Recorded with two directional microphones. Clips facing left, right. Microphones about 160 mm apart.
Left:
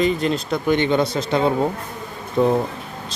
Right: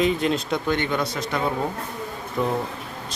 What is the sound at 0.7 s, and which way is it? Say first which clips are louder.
Speech: left 8 dB; 20° left (ahead or behind).